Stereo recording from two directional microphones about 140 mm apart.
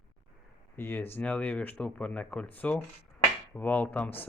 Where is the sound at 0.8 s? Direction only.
15° left (ahead or behind).